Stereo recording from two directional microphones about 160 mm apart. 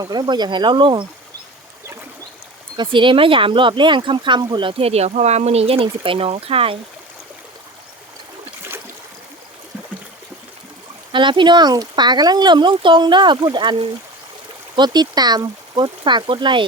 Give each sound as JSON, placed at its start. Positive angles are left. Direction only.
{"t": 0.0, "sound": "speech", "side_deg": -25}
{"t": 2.7, "sound": "speech", "side_deg": -30}
{"t": 11.1, "sound": "speech", "side_deg": -30}